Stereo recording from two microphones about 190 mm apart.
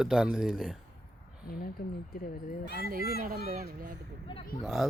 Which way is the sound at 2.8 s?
50° right (ahead or behind).